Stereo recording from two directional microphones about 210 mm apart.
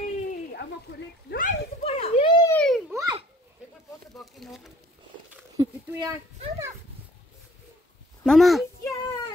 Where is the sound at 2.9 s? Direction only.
15° right (ahead or behind).